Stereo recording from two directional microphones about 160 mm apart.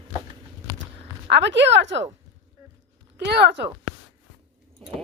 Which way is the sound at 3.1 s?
90° right.